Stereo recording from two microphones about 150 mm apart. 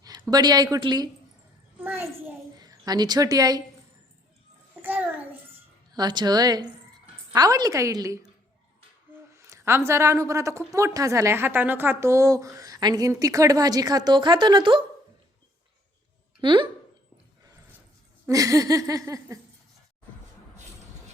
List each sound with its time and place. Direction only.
0.0 s a woman's voice: 25° right (ahead or behind)
1.8 s a sound: 15° right (ahead or behind)
2.6 s a woman's voice: 25° right (ahead or behind)
4.8 s a sound: 10° right (ahead or behind)
5.9 s a woman's voice: 30° right (ahead or behind)
9.3 s a woman's voice: 20° right (ahead or behind)
16.4 s speech: 30° right (ahead or behind)
18.3 s a woman's voice: 20° right (ahead or behind)